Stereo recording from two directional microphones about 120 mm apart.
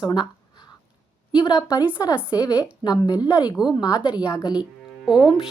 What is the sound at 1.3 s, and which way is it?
A woman's voice, 40° left (ahead or behind).